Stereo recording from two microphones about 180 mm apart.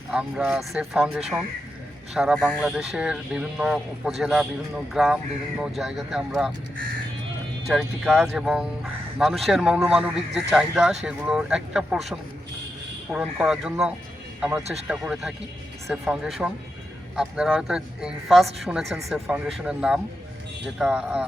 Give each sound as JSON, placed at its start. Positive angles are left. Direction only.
{"t": 0.1, "sound": "speech", "side_deg": -5}
{"t": 7.7, "sound": "speech", "side_deg": 0}
{"t": 15.9, "sound": "speech", "side_deg": -5}